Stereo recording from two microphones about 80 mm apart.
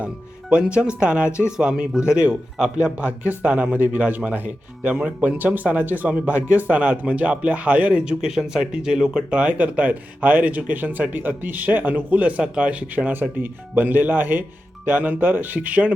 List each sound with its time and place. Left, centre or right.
0.5 s a man's voice: centre